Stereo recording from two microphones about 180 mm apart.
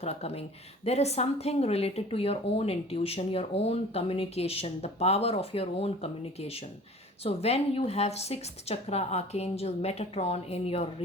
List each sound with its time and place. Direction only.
0.0 s speech: 35° left (ahead or behind)